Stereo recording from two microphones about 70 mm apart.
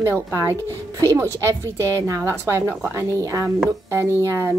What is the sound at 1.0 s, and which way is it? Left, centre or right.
A woman's voice, right.